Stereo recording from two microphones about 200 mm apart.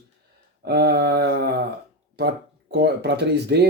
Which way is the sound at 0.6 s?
55° right (ahead or behind).